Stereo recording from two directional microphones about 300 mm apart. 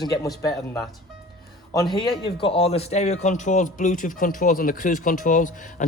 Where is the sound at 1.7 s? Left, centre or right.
Centre.